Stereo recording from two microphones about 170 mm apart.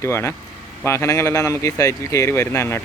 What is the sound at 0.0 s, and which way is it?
Speech, 15° left (ahead or behind).